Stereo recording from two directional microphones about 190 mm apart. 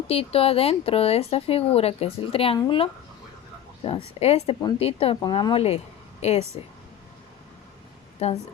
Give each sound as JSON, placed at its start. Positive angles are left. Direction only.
{"t": 0.1, "sound": "speech", "side_deg": 30}
{"t": 8.2, "sound": "speech", "side_deg": 35}